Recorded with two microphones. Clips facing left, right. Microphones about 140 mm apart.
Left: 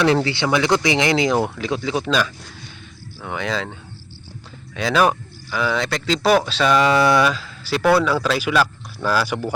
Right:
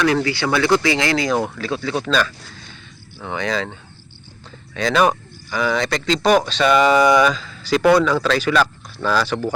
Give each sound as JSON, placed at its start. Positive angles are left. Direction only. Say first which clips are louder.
{"t": 0.0, "sound": "speech", "louder": "left 1 dB", "side_deg": 25}